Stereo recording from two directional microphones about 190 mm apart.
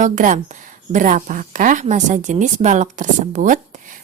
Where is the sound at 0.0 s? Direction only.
40° right (ahead or behind).